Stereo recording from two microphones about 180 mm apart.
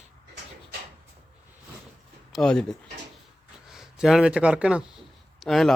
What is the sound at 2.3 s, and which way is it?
Speech, 5° left (ahead or behind).